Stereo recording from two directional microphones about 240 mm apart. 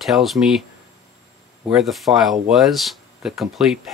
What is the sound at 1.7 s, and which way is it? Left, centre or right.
Speech, centre.